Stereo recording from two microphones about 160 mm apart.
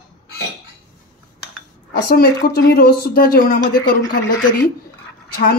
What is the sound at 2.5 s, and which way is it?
Speech, 80° left.